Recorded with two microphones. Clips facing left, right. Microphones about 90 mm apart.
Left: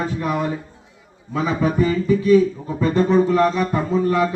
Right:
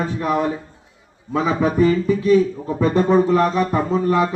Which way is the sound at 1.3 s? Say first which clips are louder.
Right 2 dB; 30° right (ahead or behind).